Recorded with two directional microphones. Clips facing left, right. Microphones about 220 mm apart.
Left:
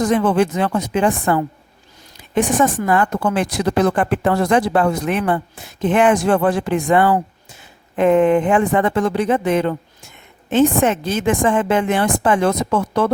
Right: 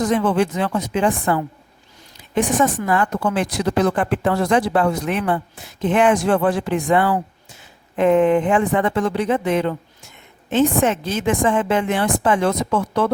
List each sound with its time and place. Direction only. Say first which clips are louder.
0.0 s a woman's voice: left 2 dB; 50° left (ahead or behind)